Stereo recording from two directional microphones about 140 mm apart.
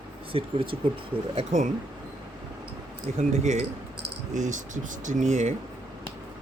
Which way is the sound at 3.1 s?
55° right (ahead or behind).